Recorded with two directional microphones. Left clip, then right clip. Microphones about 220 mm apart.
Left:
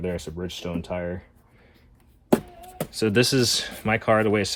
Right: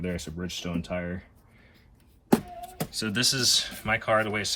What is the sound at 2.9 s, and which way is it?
Speech, 30° left (ahead or behind).